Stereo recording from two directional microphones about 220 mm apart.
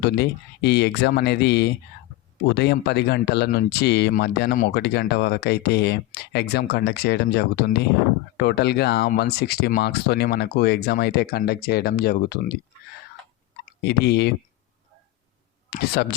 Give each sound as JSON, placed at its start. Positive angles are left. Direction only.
{"t": 0.0, "sound": "speech", "side_deg": 50}
{"t": 13.7, "sound": "speech", "side_deg": 50}
{"t": 15.7, "sound": "speech", "side_deg": 50}